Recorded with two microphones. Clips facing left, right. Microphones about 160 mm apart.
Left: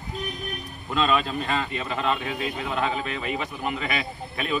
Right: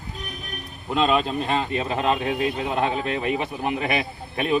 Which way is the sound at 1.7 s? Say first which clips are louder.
Right 4 dB; 30° right (ahead or behind).